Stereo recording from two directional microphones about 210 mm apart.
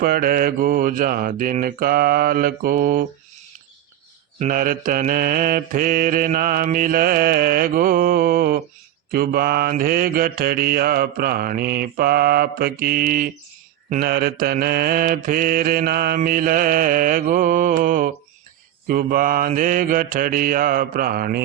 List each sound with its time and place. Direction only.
0.0 s mantra: 45° right (ahead or behind)
4.4 s mantra: 40° right (ahead or behind)